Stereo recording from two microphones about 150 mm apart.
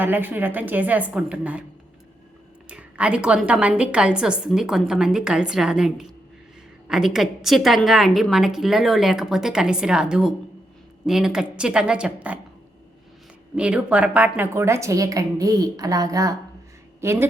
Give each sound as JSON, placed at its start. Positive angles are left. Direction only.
{"t": 0.0, "sound": "a woman's voice", "side_deg": -15}
{"t": 2.6, "sound": "a woman's voice", "side_deg": -5}
{"t": 13.6, "sound": "a woman's voice", "side_deg": -10}